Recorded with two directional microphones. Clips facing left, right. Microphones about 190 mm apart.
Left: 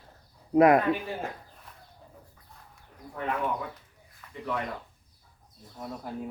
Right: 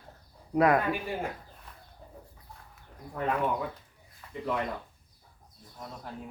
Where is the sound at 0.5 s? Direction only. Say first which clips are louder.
Left 4 dB; 20° left (ahead or behind).